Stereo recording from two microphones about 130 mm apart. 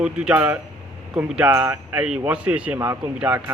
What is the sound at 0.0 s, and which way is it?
A man's voice, 10° right (ahead or behind).